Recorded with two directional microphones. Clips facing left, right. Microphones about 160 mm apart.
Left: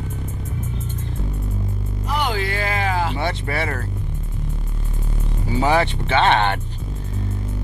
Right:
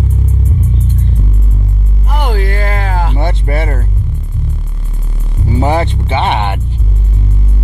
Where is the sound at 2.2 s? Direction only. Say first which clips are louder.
Right 8 dB; 55° right (ahead or behind).